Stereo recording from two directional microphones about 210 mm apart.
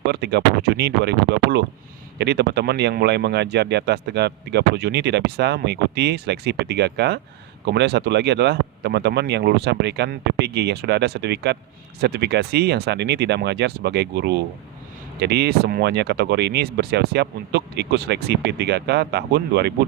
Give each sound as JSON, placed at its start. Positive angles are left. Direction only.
{"t": 0.0, "sound": "speech", "side_deg": -50}